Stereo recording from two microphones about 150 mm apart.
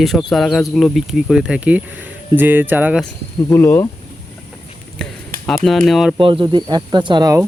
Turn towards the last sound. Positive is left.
turn(degrees=-25)  # may be behind; listen again after turning